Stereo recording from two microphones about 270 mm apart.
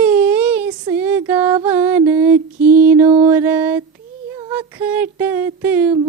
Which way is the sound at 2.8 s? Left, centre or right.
Centre.